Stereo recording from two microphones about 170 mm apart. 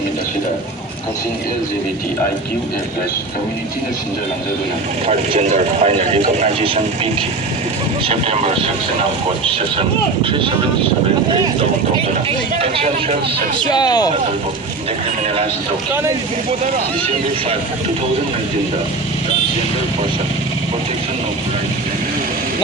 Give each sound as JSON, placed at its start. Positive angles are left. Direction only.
{"t": 5.0, "sound": "speech", "side_deg": -35}
{"t": 10.2, "sound": "speech", "side_deg": -30}
{"t": 12.5, "sound": "speech", "side_deg": -35}
{"t": 13.7, "sound": "speech", "side_deg": 25}